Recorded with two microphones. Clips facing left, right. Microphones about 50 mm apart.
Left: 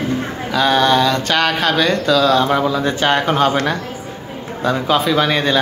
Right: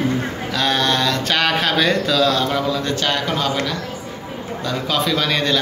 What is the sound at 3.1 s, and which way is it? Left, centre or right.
Speech, left.